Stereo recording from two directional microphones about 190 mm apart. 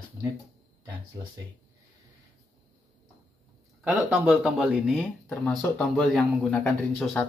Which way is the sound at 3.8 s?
5° right (ahead or behind).